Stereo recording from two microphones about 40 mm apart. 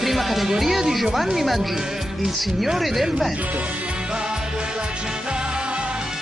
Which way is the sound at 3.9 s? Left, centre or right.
Right.